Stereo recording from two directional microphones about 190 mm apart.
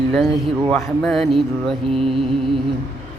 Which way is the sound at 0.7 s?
Centre (ahead or behind).